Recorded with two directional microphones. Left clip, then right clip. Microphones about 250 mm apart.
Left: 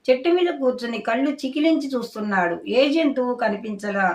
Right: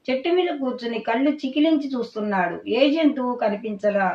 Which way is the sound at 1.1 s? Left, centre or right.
Centre.